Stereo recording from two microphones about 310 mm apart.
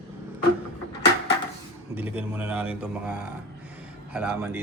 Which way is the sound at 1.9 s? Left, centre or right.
Centre.